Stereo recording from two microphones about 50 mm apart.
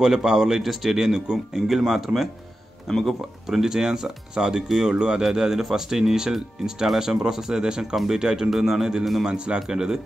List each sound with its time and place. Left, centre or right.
0.0 s speech: centre
2.9 s speech: centre
3.4 s speech: centre
5.2 s speech: centre
8.2 s speech: centre